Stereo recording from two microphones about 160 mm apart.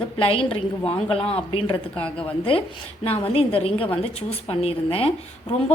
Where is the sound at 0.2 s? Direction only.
35° left (ahead or behind).